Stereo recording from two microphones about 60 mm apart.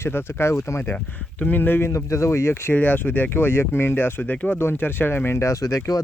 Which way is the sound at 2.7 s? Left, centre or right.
Left.